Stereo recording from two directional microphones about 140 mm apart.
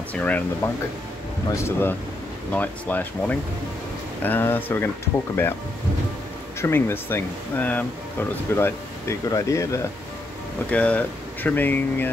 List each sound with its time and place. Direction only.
0.1 s speech: 10° left (ahead or behind)
6.6 s speech: 15° left (ahead or behind)
10.7 s speech: 10° left (ahead or behind)